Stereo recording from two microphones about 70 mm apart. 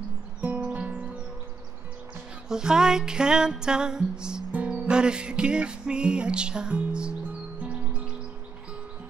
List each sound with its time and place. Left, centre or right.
0.4 s music: right
2.4 s music: centre